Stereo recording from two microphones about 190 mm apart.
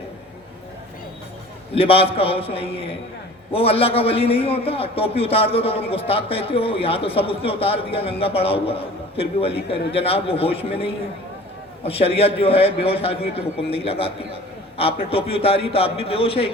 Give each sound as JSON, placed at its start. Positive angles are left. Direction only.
{"t": 1.7, "sound": "a man's voice", "side_deg": 30}